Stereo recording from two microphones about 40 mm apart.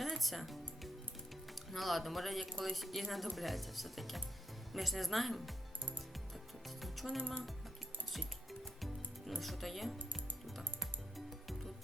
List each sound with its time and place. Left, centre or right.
0.0 s speech: centre
6.7 s music: centre
7.2 s speech: left
8.4 s music: centre